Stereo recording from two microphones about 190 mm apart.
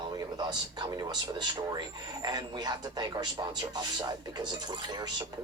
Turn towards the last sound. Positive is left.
turn(degrees=-20)  # may be behind; listen again after turning